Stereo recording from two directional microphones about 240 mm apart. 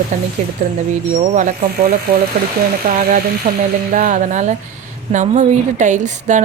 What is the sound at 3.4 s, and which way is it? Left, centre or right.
A woman's voice, right.